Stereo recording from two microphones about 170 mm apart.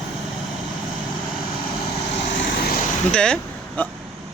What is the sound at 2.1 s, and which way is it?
Vehicle, 65° left (ahead or behind).